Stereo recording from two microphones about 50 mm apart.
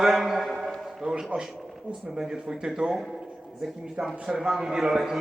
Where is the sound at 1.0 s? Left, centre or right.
Centre.